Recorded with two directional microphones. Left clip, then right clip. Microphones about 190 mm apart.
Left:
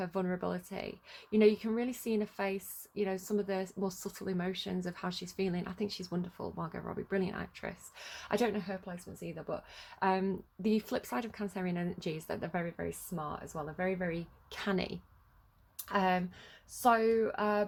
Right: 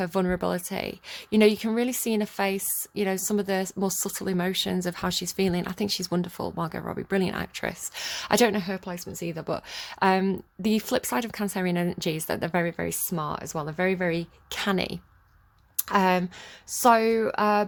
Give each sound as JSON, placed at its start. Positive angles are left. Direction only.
{"t": 0.0, "sound": "a woman's voice", "side_deg": -40}
{"t": 14.6, "sound": "speech", "side_deg": -30}
{"t": 15.8, "sound": "speech", "side_deg": -45}